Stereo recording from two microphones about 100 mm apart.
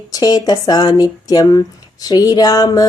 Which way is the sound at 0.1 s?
40° left (ahead or behind).